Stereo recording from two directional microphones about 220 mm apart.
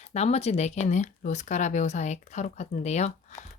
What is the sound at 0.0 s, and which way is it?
Speech, 30° left (ahead or behind).